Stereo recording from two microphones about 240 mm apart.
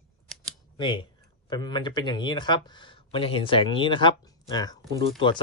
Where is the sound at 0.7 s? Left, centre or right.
Centre.